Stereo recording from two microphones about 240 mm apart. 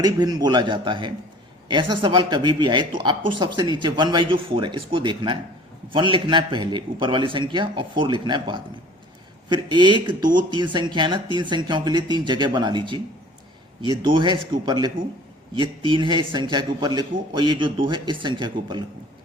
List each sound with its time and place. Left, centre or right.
0.0 s a man's voice: centre
14.0 s speech: centre